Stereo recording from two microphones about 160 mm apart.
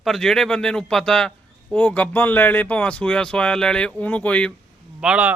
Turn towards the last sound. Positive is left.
turn(degrees=-5)  # may be behind; listen again after turning